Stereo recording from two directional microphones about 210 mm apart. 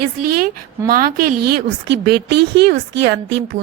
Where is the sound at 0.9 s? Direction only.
45° right (ahead or behind).